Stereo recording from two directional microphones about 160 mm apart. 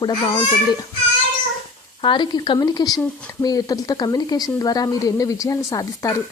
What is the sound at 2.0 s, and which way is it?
Speech, 30° left (ahead or behind).